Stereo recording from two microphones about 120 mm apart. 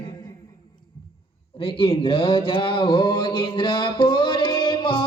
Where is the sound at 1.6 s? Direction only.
50° left (ahead or behind).